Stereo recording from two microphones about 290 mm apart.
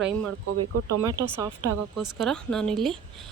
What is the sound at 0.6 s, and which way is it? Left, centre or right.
Speech, right.